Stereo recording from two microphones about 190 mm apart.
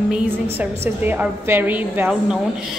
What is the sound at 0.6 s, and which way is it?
A woman's voice, 10° right (ahead or behind).